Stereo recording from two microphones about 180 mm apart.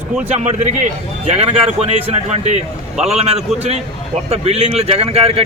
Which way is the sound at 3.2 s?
35° right (ahead or behind).